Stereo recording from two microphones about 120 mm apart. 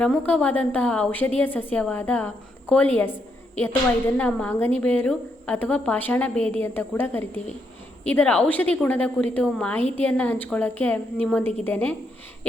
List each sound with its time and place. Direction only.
0.0 s a woman's voice: 10° left (ahead or behind)